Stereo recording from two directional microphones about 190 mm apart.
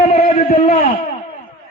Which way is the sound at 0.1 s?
35° left (ahead or behind).